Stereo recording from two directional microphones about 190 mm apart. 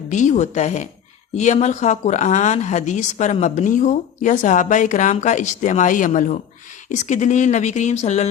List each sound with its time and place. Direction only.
0.1 s speech: 40° left (ahead or behind)